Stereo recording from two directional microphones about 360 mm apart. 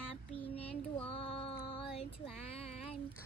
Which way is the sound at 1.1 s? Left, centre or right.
Centre.